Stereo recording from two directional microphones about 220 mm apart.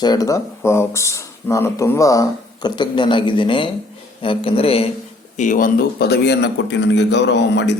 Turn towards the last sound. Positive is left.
turn(degrees=50)  # may be behind; listen again after turning